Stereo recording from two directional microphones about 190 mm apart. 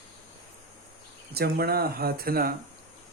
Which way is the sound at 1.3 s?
55° right (ahead or behind).